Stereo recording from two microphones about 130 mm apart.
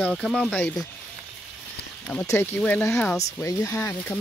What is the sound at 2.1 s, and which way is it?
Speech, 10° left (ahead or behind).